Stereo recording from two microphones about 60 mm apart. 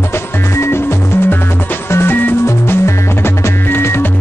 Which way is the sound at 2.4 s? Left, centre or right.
Left.